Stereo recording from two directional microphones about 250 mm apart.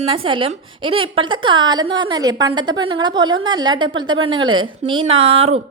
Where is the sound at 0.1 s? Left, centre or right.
Centre.